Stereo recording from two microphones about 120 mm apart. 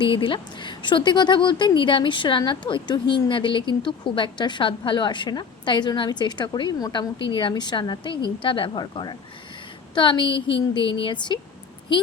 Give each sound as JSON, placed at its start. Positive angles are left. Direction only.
{"t": 0.0, "sound": "a woman's voice", "side_deg": 45}